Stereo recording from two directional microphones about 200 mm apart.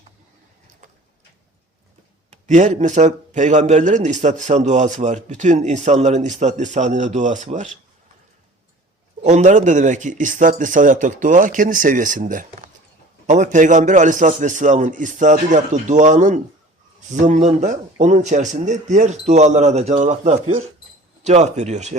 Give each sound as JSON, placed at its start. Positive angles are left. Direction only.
{"t": 2.3, "sound": "a man's voice", "side_deg": -40}
{"t": 9.2, "sound": "a man's voice", "side_deg": -35}